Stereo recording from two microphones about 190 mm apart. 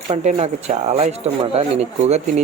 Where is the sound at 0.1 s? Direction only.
40° right (ahead or behind).